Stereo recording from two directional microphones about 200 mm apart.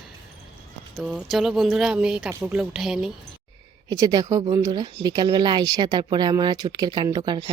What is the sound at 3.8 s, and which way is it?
Speech, 20° right (ahead or behind).